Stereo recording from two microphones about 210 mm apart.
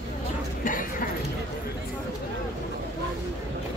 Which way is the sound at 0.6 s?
40° left (ahead or behind).